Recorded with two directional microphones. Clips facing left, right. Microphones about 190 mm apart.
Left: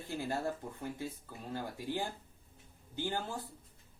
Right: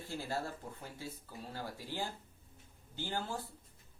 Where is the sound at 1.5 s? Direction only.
15° left (ahead or behind).